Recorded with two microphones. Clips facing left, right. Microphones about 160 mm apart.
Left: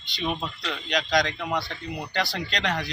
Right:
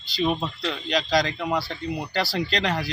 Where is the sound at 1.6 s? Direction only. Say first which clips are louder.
Right 4 dB; 30° right (ahead or behind).